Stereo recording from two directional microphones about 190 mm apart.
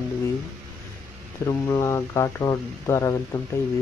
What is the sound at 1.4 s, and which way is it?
Speech, 15° left (ahead or behind).